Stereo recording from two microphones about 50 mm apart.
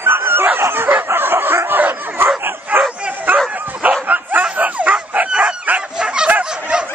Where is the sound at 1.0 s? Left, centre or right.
Right.